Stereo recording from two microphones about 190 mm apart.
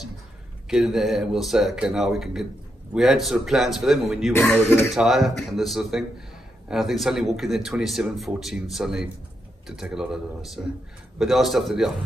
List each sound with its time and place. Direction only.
0.7 s speech: centre (ahead or behind)
4.3 s speech: 10° left (ahead or behind)
4.9 s speech: centre (ahead or behind)